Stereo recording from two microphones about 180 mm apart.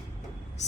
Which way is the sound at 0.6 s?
40° left (ahead or behind).